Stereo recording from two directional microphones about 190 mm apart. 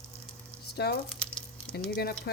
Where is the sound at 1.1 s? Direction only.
5° left (ahead or behind).